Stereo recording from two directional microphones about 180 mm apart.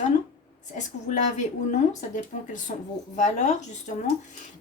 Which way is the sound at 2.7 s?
45° left (ahead or behind).